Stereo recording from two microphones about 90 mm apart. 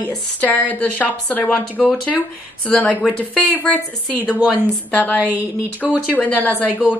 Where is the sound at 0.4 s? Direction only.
15° left (ahead or behind).